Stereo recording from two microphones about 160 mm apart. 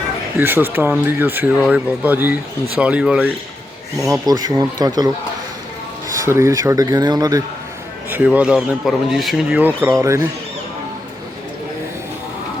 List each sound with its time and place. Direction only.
0.3 s speech: 15° right (ahead or behind)
4.0 s speech: 20° right (ahead or behind)
6.2 s speech: 15° right (ahead or behind)
8.1 s speech: 10° right (ahead or behind)